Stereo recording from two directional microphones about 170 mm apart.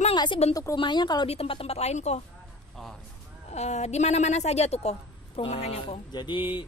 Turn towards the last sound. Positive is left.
turn(degrees=30)  # may be behind; listen again after turning